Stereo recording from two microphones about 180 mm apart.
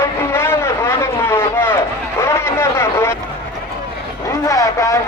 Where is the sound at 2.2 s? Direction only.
15° left (ahead or behind).